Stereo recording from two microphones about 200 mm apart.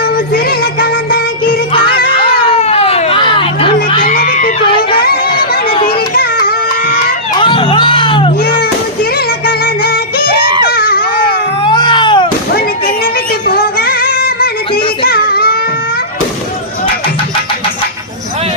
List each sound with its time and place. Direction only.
0.0 s music: 50° left (ahead or behind)
1.7 s music: 25° left (ahead or behind)
2.0 s a sound: 25° left (ahead or behind)
4.0 s crowd: 45° left (ahead or behind)
5.9 s a sound: 50° left (ahead or behind)
7.3 s music: 25° left (ahead or behind)
9.1 s music: 50° left (ahead or behind)
10.8 s baby cry: 50° left (ahead or behind)
11.6 s cat: 20° left (ahead or behind)
13.5 s music: 50° left (ahead or behind)